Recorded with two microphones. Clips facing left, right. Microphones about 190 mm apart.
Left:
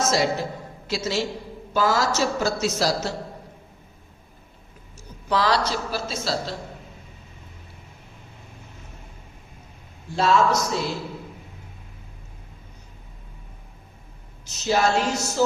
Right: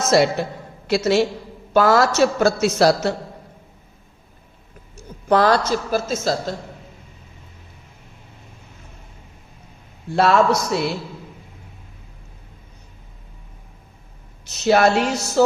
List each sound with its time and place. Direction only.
0.1 s a man's voice: 65° right (ahead or behind)
5.3 s a woman's voice: 50° right (ahead or behind)
10.2 s a man's voice: 65° right (ahead or behind)
14.4 s a man's voice: 65° right (ahead or behind)